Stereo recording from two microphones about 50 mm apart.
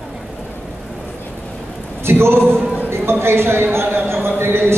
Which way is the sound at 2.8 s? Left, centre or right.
Right.